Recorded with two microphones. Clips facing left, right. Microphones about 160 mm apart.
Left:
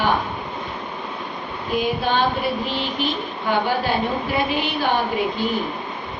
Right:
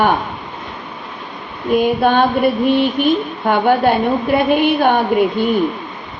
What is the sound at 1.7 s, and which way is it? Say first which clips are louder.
A woman's voice: right 8 dB; 55° right (ahead or behind).